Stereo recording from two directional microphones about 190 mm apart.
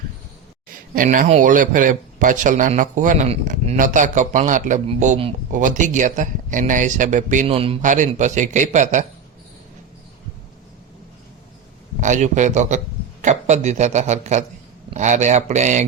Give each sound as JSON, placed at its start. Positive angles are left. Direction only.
{"t": 0.9, "sound": "a man's voice", "side_deg": -45}
{"t": 11.9, "sound": "speech", "side_deg": -40}